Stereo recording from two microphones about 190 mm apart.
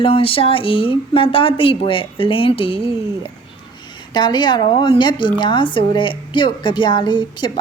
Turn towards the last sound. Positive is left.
turn(degrees=25)  # may be behind; listen again after turning